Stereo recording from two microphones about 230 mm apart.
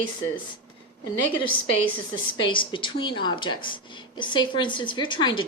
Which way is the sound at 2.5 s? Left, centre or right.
Left.